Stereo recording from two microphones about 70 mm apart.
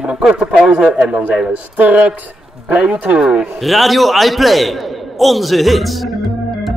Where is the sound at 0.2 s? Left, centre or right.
Centre.